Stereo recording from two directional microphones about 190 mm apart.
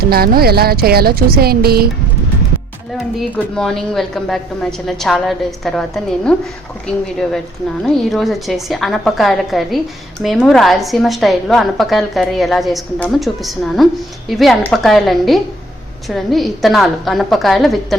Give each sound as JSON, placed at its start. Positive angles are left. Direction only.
{"t": 0.1, "sound": "a woman's voice", "side_deg": -55}
{"t": 3.2, "sound": "a woman's voice", "side_deg": 5}